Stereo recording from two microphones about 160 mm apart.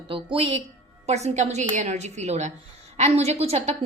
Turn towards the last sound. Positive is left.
turn(degrees=-40)  # may be behind; listen again after turning